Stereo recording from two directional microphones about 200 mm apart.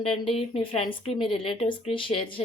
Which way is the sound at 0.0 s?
30° left (ahead or behind).